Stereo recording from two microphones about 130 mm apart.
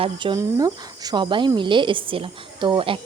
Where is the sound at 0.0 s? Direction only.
40° right (ahead or behind).